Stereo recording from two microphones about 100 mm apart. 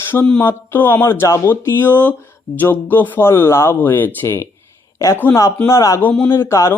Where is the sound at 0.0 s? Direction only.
25° left (ahead or behind).